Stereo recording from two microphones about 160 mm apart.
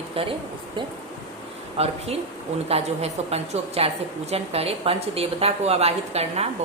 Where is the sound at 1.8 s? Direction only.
40° right (ahead or behind).